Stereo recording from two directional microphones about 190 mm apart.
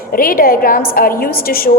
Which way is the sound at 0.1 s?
50° left (ahead or behind).